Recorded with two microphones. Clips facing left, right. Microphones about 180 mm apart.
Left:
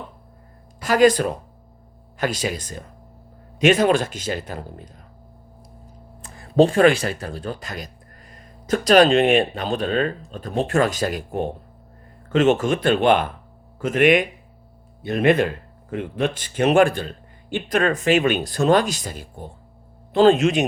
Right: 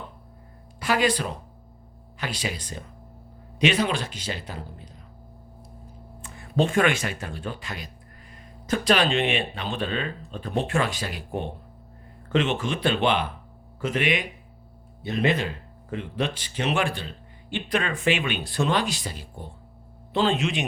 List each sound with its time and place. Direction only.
0.8 s a man's voice: 45° left (ahead or behind)
6.2 s a man's voice: 35° left (ahead or behind)
12.3 s a man's voice: 45° left (ahead or behind)